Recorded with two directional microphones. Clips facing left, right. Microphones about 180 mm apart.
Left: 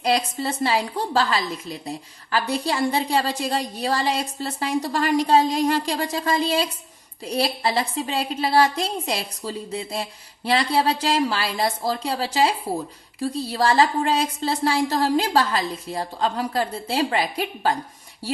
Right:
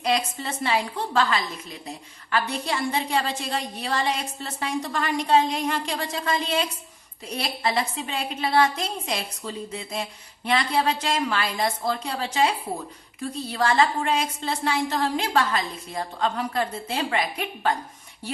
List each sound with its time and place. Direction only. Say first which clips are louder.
0.0 s a woman's voice: left 3 dB; 35° left (ahead or behind)